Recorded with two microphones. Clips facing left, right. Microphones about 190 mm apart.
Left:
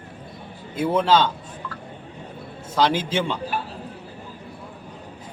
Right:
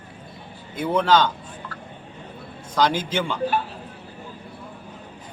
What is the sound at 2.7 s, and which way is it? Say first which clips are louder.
Speech: left 1 dB; 5° left (ahead or behind).